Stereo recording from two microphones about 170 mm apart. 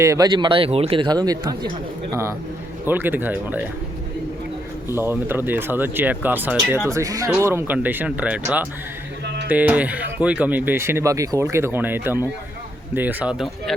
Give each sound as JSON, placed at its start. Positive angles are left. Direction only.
{"t": 0.0, "sound": "speech", "side_deg": -20}
{"t": 2.8, "sound": "speech", "side_deg": -10}
{"t": 4.9, "sound": "speech", "side_deg": -15}
{"t": 9.2, "sound": "a sound", "side_deg": -80}
{"t": 9.5, "sound": "speech", "side_deg": -10}